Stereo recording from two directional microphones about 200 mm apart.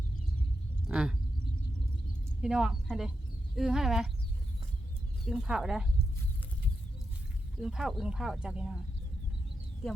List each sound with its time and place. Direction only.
0.9 s a sound: 5° right (ahead or behind)
2.4 s speech: 5° right (ahead or behind)
5.2 s speech: 5° right (ahead or behind)
7.6 s speech: centre (ahead or behind)